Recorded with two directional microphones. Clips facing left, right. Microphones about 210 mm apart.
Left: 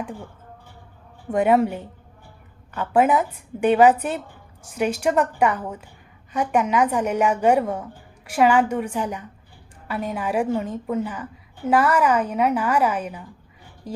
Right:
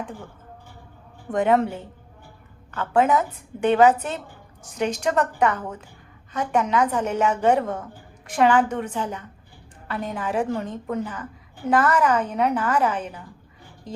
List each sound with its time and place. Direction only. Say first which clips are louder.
1.3 s a woman's voice: left 2 dB; 10° left (ahead or behind)